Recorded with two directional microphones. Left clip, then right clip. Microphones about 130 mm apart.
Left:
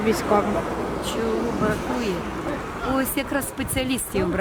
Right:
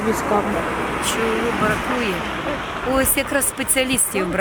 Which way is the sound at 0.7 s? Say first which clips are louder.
Right 5 dB; 40° right (ahead or behind).